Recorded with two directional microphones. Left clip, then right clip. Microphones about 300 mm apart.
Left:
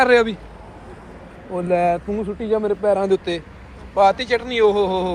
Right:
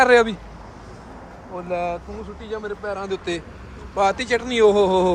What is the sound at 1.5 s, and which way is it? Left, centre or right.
Speech, left.